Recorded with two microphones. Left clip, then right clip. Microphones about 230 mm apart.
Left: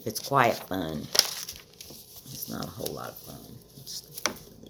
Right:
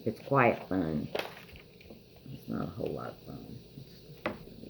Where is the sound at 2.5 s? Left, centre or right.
Left.